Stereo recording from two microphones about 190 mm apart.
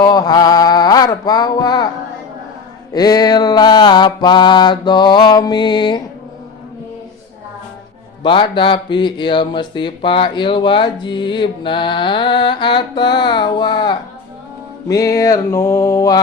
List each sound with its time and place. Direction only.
0.0 s a sound: 20° left (ahead or behind)
2.9 s speech: 20° left (ahead or behind)
8.2 s speech: 25° left (ahead or behind)
14.8 s mantra: 15° left (ahead or behind)